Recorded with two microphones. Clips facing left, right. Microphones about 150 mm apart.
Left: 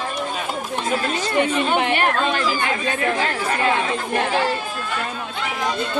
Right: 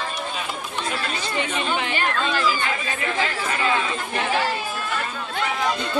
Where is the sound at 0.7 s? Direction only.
45° left (ahead or behind).